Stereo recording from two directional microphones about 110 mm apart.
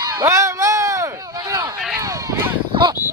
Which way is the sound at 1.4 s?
40° right (ahead or behind).